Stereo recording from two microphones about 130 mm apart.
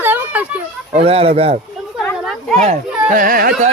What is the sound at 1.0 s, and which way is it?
Speech, 50° right (ahead or behind).